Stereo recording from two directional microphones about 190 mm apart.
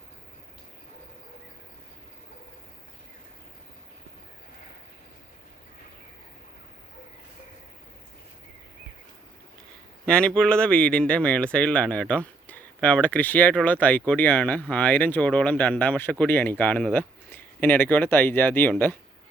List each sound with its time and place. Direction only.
10.1 s speech: 5° left (ahead or behind)